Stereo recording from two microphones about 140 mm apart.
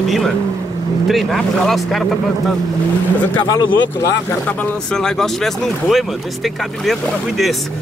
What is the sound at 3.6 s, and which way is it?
Speech, 35° left (ahead or behind).